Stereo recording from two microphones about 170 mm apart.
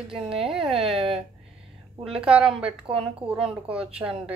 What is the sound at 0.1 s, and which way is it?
Speech, 35° right (ahead or behind).